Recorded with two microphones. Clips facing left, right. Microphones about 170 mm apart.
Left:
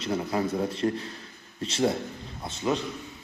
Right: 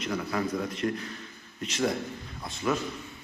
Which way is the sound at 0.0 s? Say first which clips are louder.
Left 3 dB; 25° left (ahead or behind).